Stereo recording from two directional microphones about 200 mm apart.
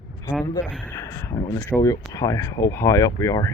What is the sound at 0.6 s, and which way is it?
Speech, 5° left (ahead or behind).